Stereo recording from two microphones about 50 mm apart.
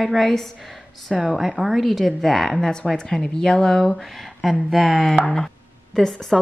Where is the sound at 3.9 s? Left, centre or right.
Centre.